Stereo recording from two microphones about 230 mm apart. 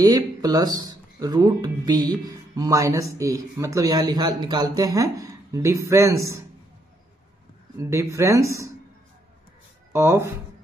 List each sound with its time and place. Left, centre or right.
0.0 s speech: centre
7.7 s speech: centre
9.9 s speech: centre